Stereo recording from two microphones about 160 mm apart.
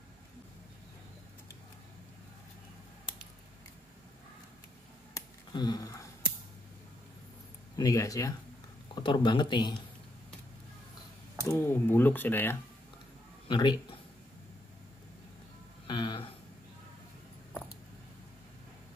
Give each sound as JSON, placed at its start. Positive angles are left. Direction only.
{"t": 5.1, "sound": "a sound", "side_deg": 25}
{"t": 7.7, "sound": "speech", "side_deg": 20}
{"t": 11.4, "sound": "speech", "side_deg": 15}
{"t": 13.5, "sound": "speech", "side_deg": 30}
{"t": 15.9, "sound": "speech", "side_deg": 30}